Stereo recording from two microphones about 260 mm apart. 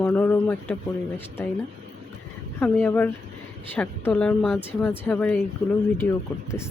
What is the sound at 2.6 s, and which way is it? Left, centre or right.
Speech, centre.